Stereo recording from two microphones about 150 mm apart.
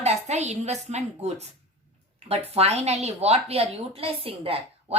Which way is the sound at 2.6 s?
45° right (ahead or behind).